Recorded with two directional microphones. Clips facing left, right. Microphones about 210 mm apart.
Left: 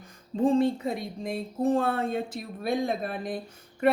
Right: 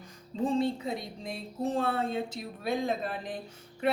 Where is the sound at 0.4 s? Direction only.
50° left (ahead or behind).